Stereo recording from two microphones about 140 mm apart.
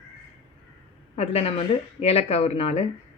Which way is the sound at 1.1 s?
50° left (ahead or behind).